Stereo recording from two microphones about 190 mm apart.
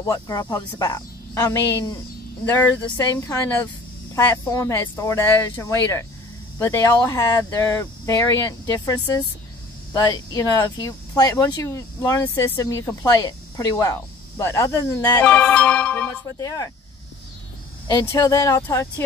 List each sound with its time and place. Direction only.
0.0 s speech: 20° left (ahead or behind)
3.2 s speech: 15° left (ahead or behind)
15.2 s speech: 5° left (ahead or behind)
16.3 s speech: 15° left (ahead or behind)
17.8 s speech: 20° left (ahead or behind)